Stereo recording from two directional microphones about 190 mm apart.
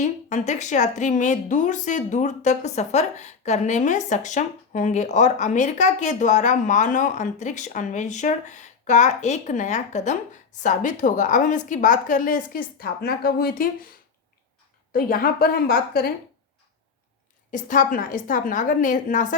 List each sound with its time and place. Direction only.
0.0 s a woman's voice: 35° left (ahead or behind)
14.9 s a woman's voice: 50° left (ahead or behind)
17.5 s a woman's voice: 45° left (ahead or behind)